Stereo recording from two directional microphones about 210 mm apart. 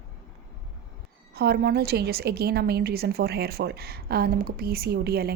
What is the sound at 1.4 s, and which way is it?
A woman's voice, 50° right (ahead or behind).